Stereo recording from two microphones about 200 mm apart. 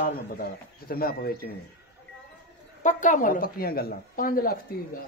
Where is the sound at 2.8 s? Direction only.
40° left (ahead or behind).